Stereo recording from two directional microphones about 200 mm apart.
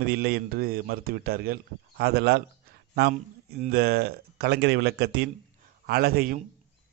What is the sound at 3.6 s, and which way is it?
A man's voice, 50° right (ahead or behind).